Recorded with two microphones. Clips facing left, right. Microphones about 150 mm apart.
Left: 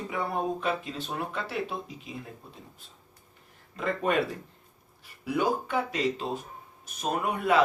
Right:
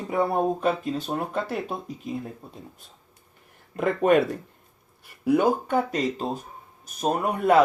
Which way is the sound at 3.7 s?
55° right (ahead or behind).